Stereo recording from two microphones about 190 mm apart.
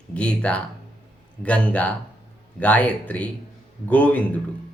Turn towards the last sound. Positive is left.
turn(degrees=10)  # may be behind; listen again after turning